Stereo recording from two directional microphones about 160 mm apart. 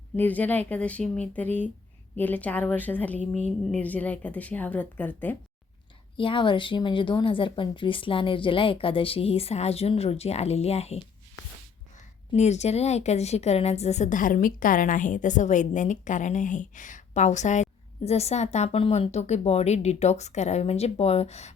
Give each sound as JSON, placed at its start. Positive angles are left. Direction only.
{"t": 0.2, "sound": "a woman's voice", "side_deg": 10}
{"t": 6.1, "sound": "a woman's voice", "side_deg": 30}
{"t": 12.3, "sound": "a woman's voice", "side_deg": 45}